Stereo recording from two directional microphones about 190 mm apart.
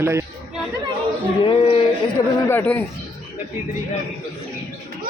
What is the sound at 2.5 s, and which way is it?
Speech, 10° left (ahead or behind).